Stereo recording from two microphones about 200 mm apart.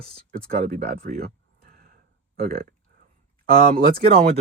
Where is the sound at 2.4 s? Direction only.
45° right (ahead or behind).